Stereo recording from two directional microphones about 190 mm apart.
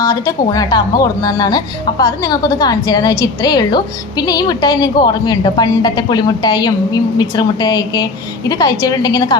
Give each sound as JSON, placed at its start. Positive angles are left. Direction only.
{"t": 0.0, "sound": "a woman's voice", "side_deg": 20}